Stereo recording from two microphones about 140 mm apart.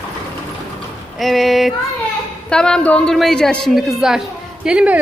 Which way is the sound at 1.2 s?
Centre (ahead or behind).